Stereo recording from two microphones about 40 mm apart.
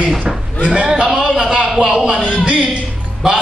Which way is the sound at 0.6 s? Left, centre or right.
Right.